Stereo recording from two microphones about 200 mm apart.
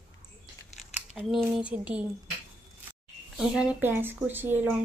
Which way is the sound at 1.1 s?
Centre (ahead or behind).